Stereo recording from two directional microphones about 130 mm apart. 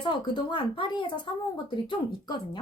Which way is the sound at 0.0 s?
40° left (ahead or behind).